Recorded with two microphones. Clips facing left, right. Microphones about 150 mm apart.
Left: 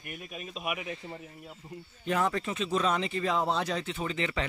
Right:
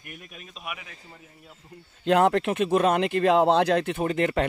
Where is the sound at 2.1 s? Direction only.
70° right (ahead or behind).